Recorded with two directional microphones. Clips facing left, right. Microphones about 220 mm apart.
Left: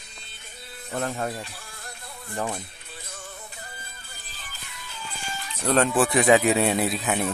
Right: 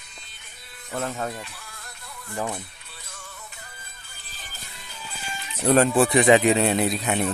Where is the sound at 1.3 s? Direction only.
30° left (ahead or behind).